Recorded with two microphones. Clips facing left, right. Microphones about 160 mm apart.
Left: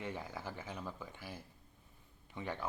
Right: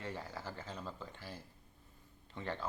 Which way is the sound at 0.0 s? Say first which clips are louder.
Left 1 dB; 15° left (ahead or behind).